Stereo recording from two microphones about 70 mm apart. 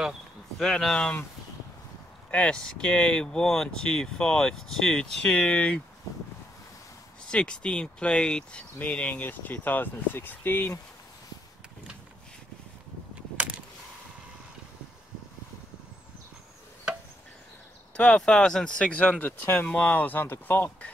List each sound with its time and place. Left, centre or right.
0.6 s speech: centre
2.3 s speech: centre
7.2 s speech: centre; by 10.7 s left
17.9 s speech: centre; by 20.9 s left